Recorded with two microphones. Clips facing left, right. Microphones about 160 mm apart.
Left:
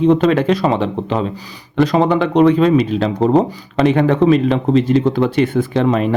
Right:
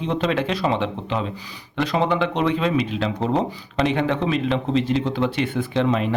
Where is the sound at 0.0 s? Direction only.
45° left (ahead or behind).